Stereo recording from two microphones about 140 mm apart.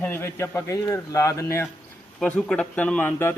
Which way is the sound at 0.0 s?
15° left (ahead or behind).